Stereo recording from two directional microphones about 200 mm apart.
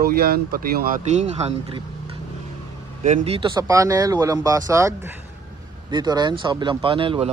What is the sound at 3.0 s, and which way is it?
Speech, 35° right (ahead or behind).